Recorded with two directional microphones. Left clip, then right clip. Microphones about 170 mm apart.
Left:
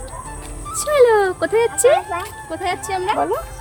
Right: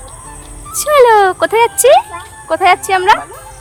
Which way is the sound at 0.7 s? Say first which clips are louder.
Right 6 dB; centre (ahead or behind).